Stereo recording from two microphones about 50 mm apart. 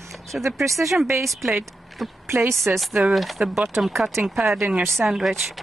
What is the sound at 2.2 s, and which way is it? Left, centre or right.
Speech, right.